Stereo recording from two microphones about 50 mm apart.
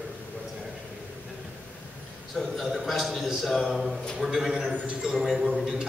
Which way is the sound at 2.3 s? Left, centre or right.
Centre.